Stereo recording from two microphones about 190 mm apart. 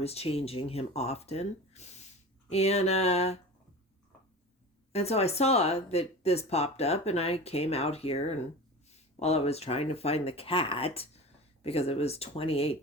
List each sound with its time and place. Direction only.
0.0 s speech: 30° left (ahead or behind)
4.9 s speech: 35° left (ahead or behind)